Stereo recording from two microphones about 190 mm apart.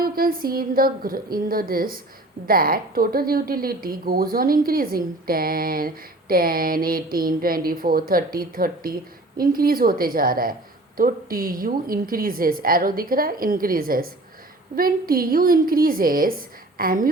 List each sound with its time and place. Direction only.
0.0 s speech: 50° right (ahead or behind)